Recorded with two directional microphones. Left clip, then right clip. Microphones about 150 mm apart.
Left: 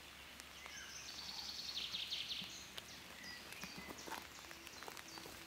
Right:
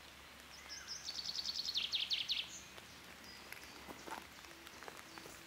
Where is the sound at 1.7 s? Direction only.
30° right (ahead or behind).